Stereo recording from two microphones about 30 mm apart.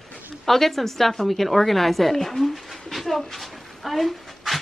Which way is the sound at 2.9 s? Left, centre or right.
Centre.